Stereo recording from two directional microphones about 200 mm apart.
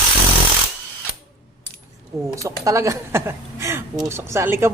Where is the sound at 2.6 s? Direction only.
15° right (ahead or behind).